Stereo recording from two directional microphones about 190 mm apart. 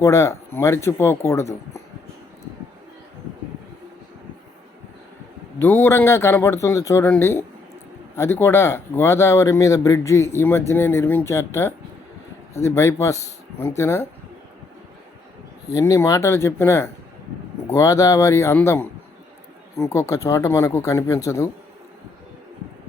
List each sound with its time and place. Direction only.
0.0 s speech: 15° left (ahead or behind)
5.5 s speech: 10° left (ahead or behind)
15.7 s speech: 15° left (ahead or behind)